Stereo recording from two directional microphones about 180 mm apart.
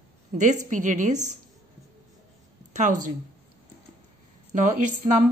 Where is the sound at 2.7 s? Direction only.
45° right (ahead or behind).